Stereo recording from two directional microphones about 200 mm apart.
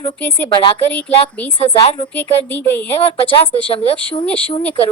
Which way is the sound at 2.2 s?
10° left (ahead or behind).